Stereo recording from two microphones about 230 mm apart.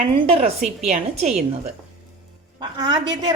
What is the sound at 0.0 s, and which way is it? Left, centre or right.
A woman's voice, right.